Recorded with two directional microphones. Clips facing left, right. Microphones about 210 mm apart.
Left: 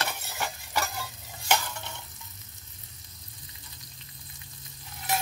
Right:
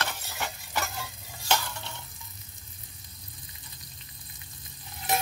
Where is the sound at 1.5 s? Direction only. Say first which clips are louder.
Left 1 dB; 15° left (ahead or behind).